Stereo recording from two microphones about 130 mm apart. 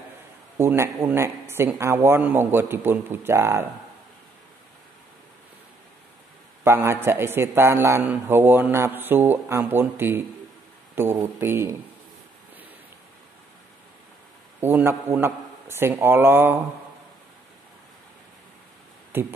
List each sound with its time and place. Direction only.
0.6 s a man's voice: 20° right (ahead or behind)
6.6 s a man's voice: 20° right (ahead or behind)
14.6 s a man's voice: 15° right (ahead or behind)
19.1 s speech: 15° right (ahead or behind)